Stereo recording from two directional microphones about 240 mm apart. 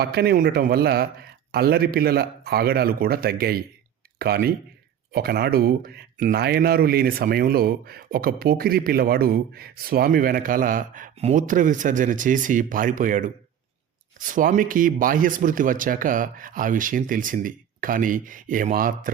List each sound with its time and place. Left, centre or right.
0.0 s speech: right